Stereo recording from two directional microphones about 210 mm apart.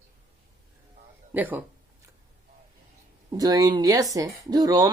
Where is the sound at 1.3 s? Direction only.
10° right (ahead or behind).